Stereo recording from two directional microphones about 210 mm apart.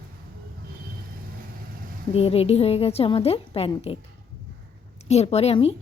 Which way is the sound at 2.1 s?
30° left (ahead or behind).